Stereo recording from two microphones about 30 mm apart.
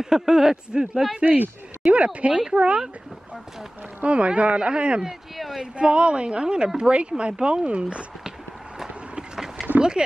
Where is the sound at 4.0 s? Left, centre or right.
Right.